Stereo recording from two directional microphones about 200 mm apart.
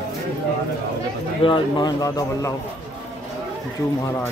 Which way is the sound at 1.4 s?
25° left (ahead or behind).